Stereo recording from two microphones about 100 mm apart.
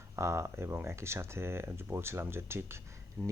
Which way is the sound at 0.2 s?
30° right (ahead or behind).